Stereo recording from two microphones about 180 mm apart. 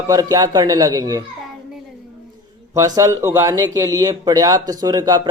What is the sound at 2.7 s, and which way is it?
Speech, 15° right (ahead or behind).